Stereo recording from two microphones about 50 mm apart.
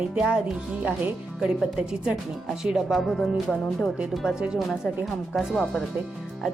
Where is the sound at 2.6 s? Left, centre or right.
Centre.